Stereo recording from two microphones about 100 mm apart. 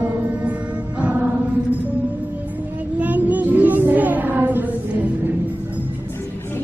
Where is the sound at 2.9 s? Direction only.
15° right (ahead or behind).